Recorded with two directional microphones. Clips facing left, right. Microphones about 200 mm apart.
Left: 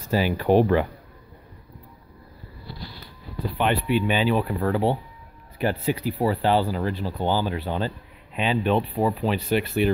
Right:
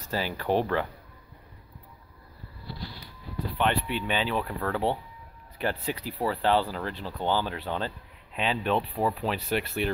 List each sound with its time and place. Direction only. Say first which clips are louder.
0.1 s speech: left 7 dB; 15° left (ahead or behind)
3.5 s speech: left 5 dB; 10° left (ahead or behind)
6.1 s speech: left 3 dB; 20° left (ahead or behind)
6.4 s speech: left 1 dB; 10° left (ahead or behind)